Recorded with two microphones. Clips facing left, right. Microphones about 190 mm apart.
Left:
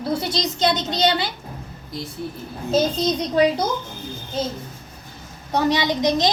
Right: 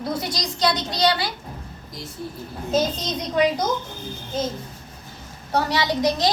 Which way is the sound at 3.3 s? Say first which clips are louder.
Left 1 dB; 30° left (ahead or behind).